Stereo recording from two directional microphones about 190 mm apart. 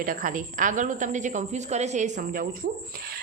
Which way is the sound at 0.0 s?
45° right (ahead or behind).